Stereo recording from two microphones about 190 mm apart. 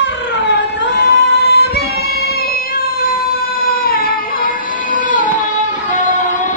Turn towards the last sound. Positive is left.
turn(degrees=40)  # may be behind; listen again after turning